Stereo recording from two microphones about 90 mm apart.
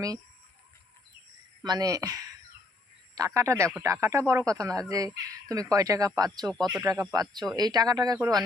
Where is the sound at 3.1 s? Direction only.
40° right (ahead or behind).